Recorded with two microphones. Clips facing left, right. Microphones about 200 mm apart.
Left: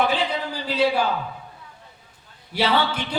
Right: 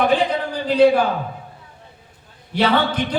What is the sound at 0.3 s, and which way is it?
Speech, 50° right (ahead or behind).